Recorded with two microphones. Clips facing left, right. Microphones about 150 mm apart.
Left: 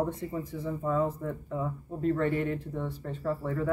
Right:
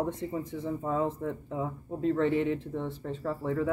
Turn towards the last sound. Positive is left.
turn(degrees=-20)  # may be behind; listen again after turning